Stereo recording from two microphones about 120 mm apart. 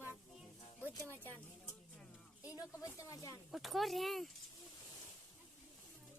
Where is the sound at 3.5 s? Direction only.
Centre (ahead or behind).